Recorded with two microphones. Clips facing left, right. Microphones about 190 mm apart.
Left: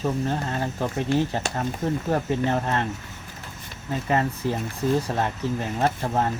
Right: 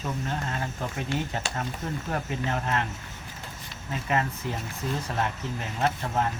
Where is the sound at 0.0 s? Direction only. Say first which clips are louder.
Left 6 dB; 35° left (ahead or behind).